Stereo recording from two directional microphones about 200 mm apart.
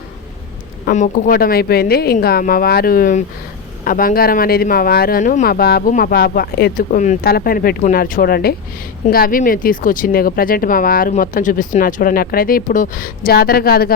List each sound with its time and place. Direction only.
0.9 s speech: 40° left (ahead or behind)